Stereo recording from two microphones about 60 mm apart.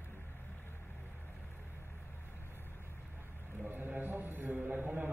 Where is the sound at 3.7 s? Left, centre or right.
Right.